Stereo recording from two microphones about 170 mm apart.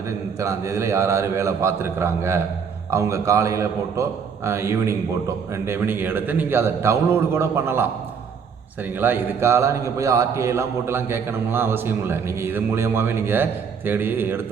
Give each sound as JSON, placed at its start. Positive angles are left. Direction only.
{"t": 0.3, "sound": "a man's voice", "side_deg": -15}